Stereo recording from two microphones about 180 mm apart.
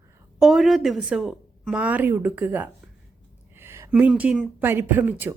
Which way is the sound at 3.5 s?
15° right (ahead or behind).